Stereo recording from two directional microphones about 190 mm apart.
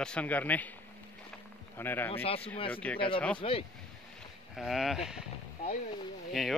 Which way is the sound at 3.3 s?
30° left (ahead or behind).